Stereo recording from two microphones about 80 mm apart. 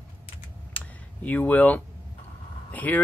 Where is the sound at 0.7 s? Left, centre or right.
Left.